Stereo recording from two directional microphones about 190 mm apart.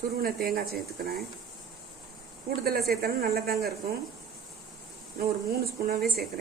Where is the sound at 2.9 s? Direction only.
55° right (ahead or behind).